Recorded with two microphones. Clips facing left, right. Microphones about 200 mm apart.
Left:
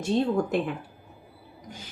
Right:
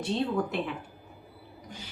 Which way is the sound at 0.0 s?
45° left (ahead or behind).